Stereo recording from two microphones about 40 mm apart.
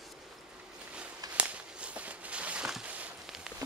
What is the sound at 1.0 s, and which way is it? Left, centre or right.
Walk, right.